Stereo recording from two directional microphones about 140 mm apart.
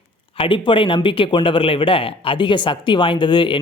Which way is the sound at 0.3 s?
35° left (ahead or behind).